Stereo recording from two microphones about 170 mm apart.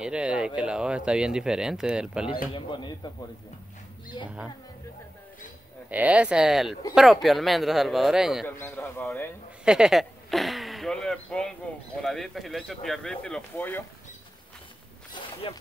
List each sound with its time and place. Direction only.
0.0 s speech: 5° right (ahead or behind)
2.5 s speech: 25° left (ahead or behind)
5.9 s speech: 10° right (ahead or behind)
8.5 s a man's voice: 15° left (ahead or behind)
9.7 s speech: 5° right (ahead or behind)
15.5 s speech: 30° left (ahead or behind)